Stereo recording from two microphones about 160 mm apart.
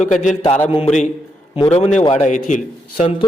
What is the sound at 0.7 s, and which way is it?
A man's voice, 35° left (ahead or behind).